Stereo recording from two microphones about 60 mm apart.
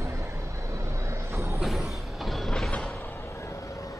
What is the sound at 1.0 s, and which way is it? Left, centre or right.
Vehicle, right.